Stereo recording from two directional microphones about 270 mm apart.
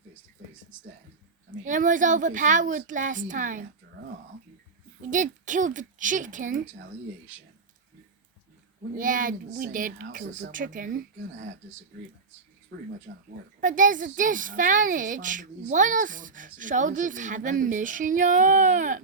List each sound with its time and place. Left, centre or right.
1.5 s a woman's voice: right
5.1 s a woman's voice: right
9.0 s a woman's voice: right
12.7 s a woman's voice: right